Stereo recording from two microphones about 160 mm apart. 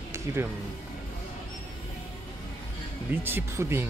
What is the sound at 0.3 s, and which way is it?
Speech, 15° right (ahead or behind).